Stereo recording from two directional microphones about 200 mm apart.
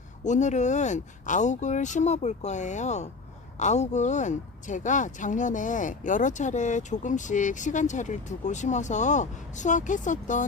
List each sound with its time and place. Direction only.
0.3 s speech: 35° left (ahead or behind)